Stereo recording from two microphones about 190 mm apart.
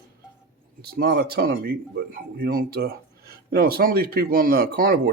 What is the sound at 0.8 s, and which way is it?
Speech, 55° right (ahead or behind).